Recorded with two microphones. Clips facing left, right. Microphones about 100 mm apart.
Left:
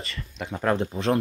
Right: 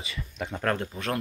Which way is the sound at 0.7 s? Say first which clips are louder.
Left 7 dB; 25° left (ahead or behind).